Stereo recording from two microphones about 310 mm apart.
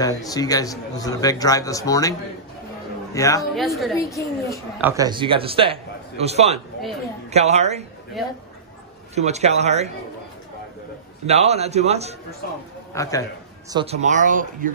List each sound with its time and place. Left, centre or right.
0.0 s a man's voice: centre
3.5 s a woman's voice: centre
4.7 s a man's voice: centre
9.1 s speech: right
11.2 s speech: centre
12.9 s a man's voice: centre
13.7 s speech: centre